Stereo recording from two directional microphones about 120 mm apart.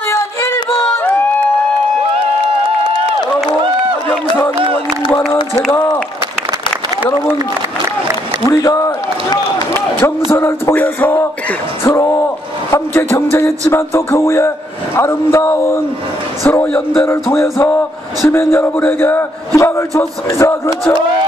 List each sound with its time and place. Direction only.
5.1 s speech: 20° left (ahead or behind)
8.5 s speech: 25° left (ahead or behind)
10.3 s music: 20° left (ahead or behind)
11.8 s speech: 20° left (ahead or behind)